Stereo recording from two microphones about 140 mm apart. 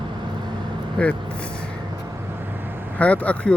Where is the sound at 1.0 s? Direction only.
5° left (ahead or behind).